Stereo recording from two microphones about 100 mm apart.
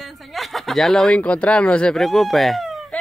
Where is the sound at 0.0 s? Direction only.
Centre (ahead or behind).